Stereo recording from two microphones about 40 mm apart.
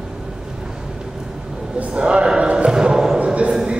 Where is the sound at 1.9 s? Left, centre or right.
Right.